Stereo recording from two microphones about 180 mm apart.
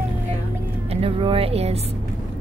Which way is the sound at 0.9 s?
30° right (ahead or behind).